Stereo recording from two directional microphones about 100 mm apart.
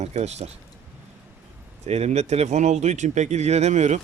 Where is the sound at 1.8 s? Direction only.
90° right.